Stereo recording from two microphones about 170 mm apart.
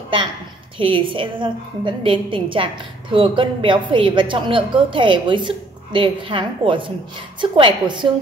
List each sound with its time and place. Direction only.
0.7 s a woman's voice: 30° right (ahead or behind)